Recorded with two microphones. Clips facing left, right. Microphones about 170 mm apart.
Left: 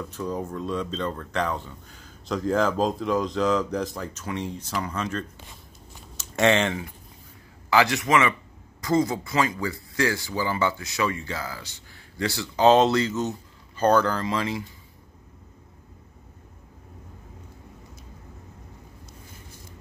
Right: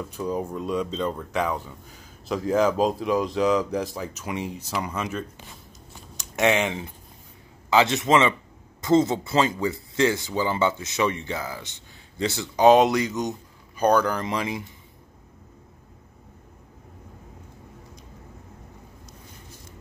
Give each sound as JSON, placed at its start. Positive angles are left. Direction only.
{"t": 0.1, "sound": "speech", "side_deg": -10}
{"t": 6.5, "sound": "speech", "side_deg": -15}
{"t": 7.7, "sound": "speech", "side_deg": -25}